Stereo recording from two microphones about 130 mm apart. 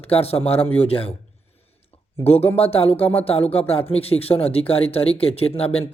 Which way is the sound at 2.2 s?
50° left (ahead or behind).